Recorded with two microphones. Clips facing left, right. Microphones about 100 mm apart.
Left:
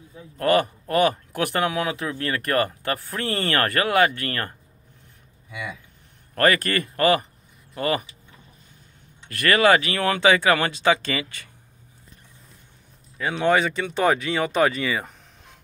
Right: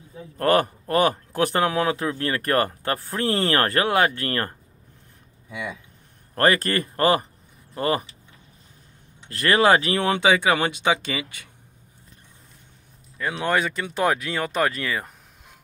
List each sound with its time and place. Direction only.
0.4 s speech: 40° right (ahead or behind)
5.5 s speech: 5° left (ahead or behind)
6.3 s speech: 30° right (ahead or behind)
9.3 s speech: 30° right (ahead or behind); by 11.4 s 10° right (ahead or behind)
13.2 s speech: centre (ahead or behind)